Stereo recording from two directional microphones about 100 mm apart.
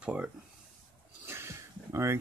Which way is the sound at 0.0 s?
15° right (ahead or behind).